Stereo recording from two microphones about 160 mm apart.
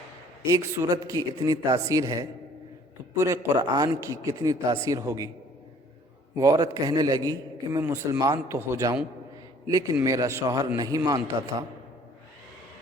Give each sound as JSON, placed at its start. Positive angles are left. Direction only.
{"t": 0.4, "sound": "a man's voice", "side_deg": -20}
{"t": 6.3, "sound": "a man's voice", "side_deg": -20}